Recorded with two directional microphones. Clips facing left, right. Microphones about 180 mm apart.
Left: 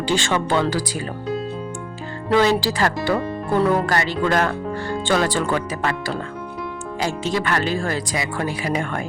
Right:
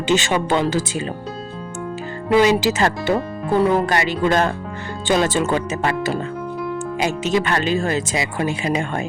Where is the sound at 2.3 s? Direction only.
15° right (ahead or behind).